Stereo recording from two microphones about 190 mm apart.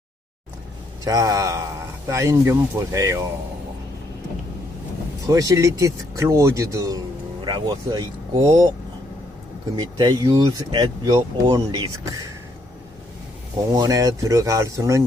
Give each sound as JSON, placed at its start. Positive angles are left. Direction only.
{"t": 1.0, "sound": "speech", "side_deg": -20}
{"t": 5.3, "sound": "speech", "side_deg": -15}
{"t": 9.7, "sound": "speech", "side_deg": -20}
{"t": 13.7, "sound": "speech", "side_deg": -20}